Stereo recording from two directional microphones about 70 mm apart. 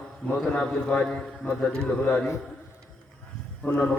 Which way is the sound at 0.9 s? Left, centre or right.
Centre.